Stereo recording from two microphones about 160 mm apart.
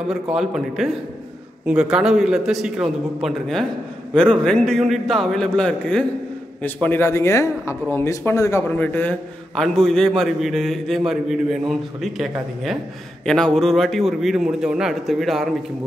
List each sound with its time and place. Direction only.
0.1 s a man's voice: 5° right (ahead or behind)